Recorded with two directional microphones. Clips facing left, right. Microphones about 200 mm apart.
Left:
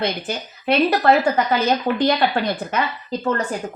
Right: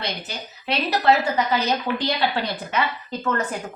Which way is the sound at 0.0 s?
55° left (ahead or behind).